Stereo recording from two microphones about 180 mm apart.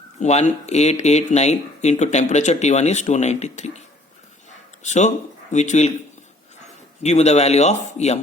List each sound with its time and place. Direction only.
0.2 s speech: 40° left (ahead or behind)
7.0 s speech: 40° left (ahead or behind)